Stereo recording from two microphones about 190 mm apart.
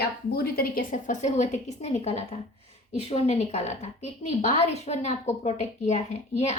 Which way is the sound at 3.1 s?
35° left (ahead or behind).